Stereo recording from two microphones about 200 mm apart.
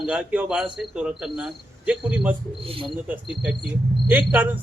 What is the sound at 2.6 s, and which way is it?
Speech, 25° right (ahead or behind).